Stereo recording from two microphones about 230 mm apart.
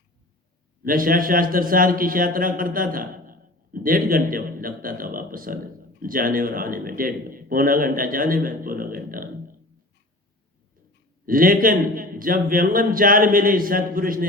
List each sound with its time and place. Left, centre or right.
0.9 s a man's voice: right
11.3 s a man's voice: right